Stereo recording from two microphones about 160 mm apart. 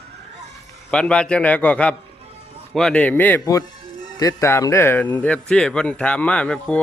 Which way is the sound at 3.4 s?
20° left (ahead or behind).